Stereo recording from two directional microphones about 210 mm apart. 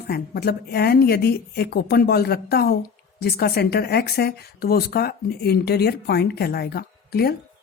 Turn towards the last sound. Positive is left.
turn(degrees=45)  # may be behind; listen again after turning